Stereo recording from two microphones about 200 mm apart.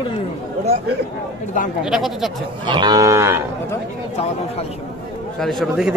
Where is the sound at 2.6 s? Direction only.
20° right (ahead or behind).